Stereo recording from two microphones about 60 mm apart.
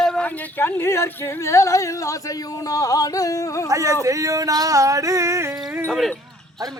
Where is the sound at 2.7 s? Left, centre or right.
Left.